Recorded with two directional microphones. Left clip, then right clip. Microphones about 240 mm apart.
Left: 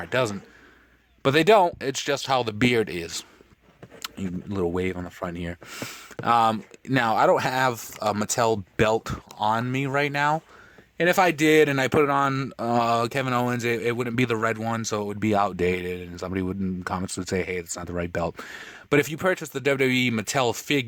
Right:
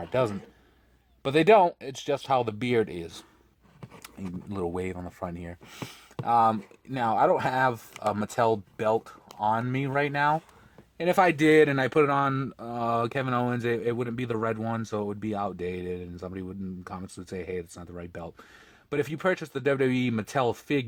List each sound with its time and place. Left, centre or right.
0.0 s a man's voice: left